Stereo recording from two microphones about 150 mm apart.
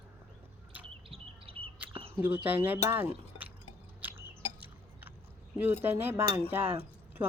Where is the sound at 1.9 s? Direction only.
35° right (ahead or behind).